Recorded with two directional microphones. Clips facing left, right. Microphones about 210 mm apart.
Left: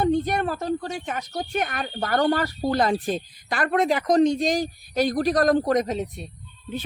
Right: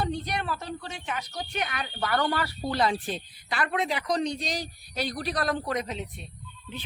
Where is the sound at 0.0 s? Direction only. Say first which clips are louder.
Left 9 dB; 50° left (ahead or behind).